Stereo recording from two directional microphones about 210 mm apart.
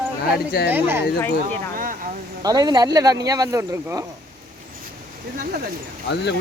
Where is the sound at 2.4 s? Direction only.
20° right (ahead or behind).